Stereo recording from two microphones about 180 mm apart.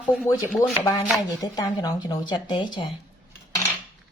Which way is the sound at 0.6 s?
15° left (ahead or behind).